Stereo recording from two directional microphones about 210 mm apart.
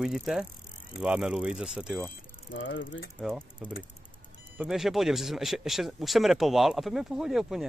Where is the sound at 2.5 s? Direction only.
65° left (ahead or behind).